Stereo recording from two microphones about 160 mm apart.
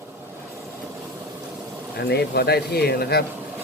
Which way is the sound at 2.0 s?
90° left.